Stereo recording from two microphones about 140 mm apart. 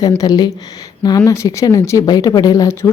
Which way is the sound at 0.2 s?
30° left (ahead or behind).